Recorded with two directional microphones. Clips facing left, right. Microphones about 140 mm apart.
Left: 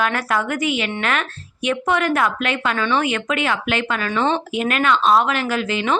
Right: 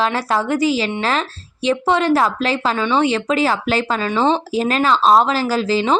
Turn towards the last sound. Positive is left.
turn(degrees=-30)  # may be behind; listen again after turning